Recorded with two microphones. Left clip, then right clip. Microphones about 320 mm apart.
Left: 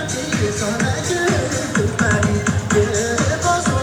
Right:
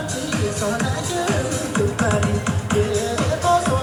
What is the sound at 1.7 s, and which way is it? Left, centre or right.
Music, centre.